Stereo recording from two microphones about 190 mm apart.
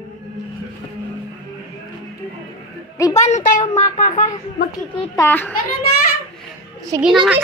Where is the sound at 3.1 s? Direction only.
35° left (ahead or behind).